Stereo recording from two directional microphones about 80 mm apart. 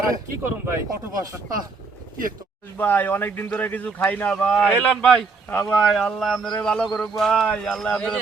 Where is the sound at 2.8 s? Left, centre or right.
Left.